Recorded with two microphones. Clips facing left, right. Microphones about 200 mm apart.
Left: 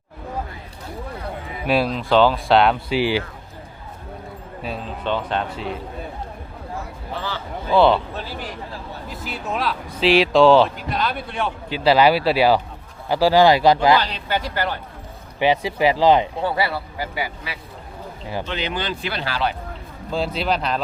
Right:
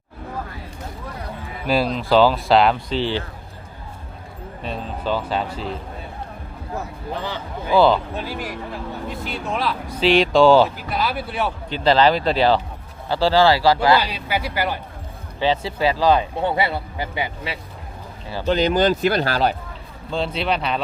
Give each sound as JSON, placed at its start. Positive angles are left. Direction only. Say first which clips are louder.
{"t": 1.6, "sound": "speech", "louder": "even", "side_deg": 0}
{"t": 2.9, "sound": "speech", "louder": "left 2 dB", "side_deg": 10}
{"t": 4.6, "sound": "speech", "louder": "right 1 dB", "side_deg": 0}
{"t": 7.2, "sound": "speech", "louder": "even", "side_deg": -15}
{"t": 7.7, "sound": "speech", "louder": "even", "side_deg": 0}
{"t": 8.1, "sound": "speech", "louder": "right 3 dB", "side_deg": -15}
{"t": 9.0, "sound": "speech", "louder": "even", "side_deg": 0}
{"t": 11.7, "sound": "speech", "louder": "left 1 dB", "side_deg": 5}
{"t": 14.0, "sound": "speech", "louder": "even", "side_deg": -10}
{"t": 15.4, "sound": "speech", "louder": "left 2 dB", "side_deg": 15}
{"t": 16.4, "sound": "speech", "louder": "right 1 dB", "side_deg": -20}
{"t": 18.4, "sound": "speech", "louder": "right 13 dB", "side_deg": -40}
{"t": 20.1, "sound": "speech", "louder": "even", "side_deg": 5}